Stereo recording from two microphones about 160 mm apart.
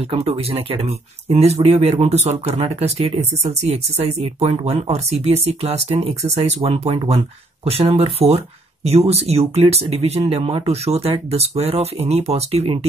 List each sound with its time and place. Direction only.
0.1 s speech: 40° right (ahead or behind)